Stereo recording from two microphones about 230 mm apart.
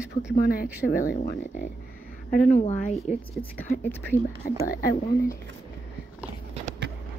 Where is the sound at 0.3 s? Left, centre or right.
Left.